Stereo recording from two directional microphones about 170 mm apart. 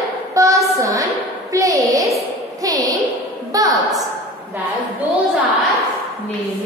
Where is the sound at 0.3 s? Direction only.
20° right (ahead or behind).